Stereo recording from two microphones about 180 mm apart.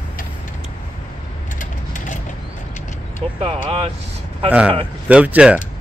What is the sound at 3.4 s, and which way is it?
Speech, 30° right (ahead or behind).